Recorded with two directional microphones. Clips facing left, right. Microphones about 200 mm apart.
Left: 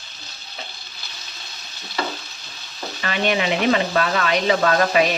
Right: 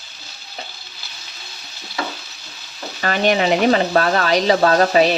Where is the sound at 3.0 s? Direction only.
40° right (ahead or behind).